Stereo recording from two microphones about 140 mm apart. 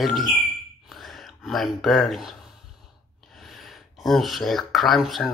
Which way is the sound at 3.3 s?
Centre (ahead or behind).